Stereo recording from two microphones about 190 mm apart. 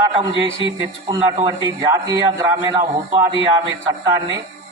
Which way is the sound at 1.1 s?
20° right (ahead or behind).